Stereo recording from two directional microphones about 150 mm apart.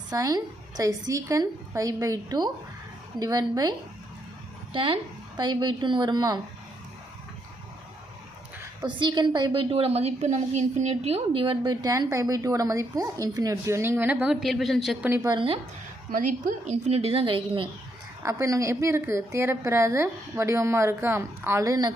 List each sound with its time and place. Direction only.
0.1 s a woman's voice: 25° right (ahead or behind)
4.7 s a woman's voice: 35° right (ahead or behind)
8.8 s a woman's voice: 30° right (ahead or behind); by 14.9 s centre (ahead or behind)
15.0 s a woman's voice: 15° right (ahead or behind)
15.3 s speech: 35° right (ahead or behind)
16.1 s a woman's voice: 60° right (ahead or behind); by 17.7 s 35° right (ahead or behind)
18.2 s a woman's voice: 20° right (ahead or behind)